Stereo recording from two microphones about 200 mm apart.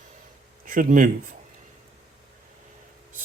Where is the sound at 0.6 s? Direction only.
45° right (ahead or behind).